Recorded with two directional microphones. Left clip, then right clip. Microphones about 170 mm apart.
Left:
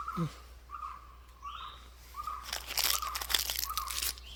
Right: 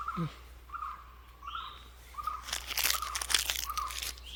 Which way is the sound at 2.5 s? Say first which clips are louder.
Even; 10° left (ahead or behind).